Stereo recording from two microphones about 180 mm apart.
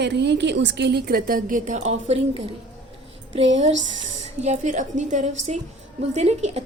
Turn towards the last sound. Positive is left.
turn(degrees=-35)  # may be behind; listen again after turning